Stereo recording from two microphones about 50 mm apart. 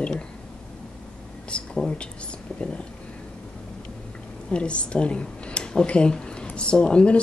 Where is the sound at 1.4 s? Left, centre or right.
Centre.